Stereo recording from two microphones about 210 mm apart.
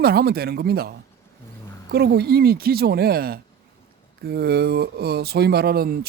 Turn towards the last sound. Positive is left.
turn(degrees=-45)  # may be behind; listen again after turning